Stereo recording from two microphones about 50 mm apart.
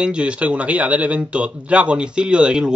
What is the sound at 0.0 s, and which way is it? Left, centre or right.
Speech, right.